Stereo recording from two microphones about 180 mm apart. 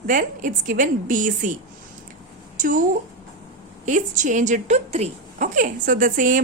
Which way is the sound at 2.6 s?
45° right (ahead or behind).